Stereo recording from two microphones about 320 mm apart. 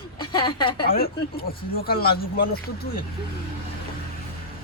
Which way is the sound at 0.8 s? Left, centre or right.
Left.